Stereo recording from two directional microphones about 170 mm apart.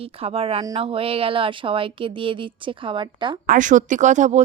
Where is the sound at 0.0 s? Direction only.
35° right (ahead or behind).